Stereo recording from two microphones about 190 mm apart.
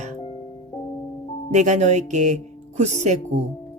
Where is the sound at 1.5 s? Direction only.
40° right (ahead or behind).